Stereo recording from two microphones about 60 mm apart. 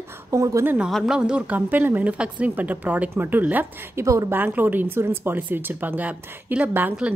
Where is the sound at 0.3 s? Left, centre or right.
Right.